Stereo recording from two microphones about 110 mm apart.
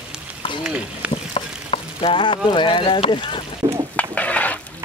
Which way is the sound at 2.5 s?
50° left (ahead or behind).